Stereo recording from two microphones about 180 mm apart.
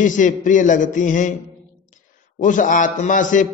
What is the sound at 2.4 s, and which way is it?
A man's voice, 45° left (ahead or behind).